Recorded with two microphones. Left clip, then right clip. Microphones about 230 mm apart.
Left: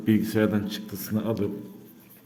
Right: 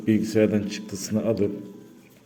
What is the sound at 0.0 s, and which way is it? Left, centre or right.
Speech, centre.